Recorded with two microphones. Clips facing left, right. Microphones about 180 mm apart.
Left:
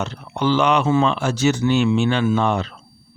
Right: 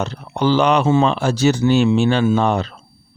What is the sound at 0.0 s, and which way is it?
Speech, 35° right (ahead or behind).